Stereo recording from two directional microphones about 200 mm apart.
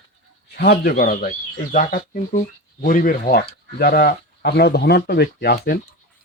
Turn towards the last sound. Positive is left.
turn(degrees=50)  # may be behind; listen again after turning